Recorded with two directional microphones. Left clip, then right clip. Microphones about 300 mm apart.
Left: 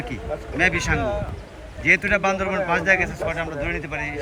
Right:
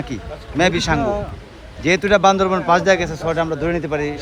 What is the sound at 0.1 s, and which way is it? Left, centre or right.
A man's voice, centre.